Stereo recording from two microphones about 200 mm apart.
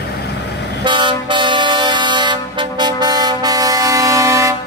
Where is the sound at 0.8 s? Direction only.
25° right (ahead or behind).